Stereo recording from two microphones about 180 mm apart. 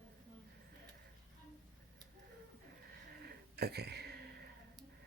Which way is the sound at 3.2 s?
65° right (ahead or behind).